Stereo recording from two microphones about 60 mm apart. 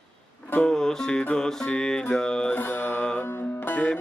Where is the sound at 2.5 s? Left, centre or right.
Left.